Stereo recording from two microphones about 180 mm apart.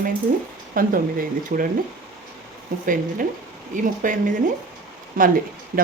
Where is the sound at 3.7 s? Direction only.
45° right (ahead or behind).